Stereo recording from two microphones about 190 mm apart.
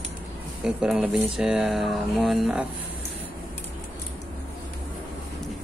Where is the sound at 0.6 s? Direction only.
5° right (ahead or behind).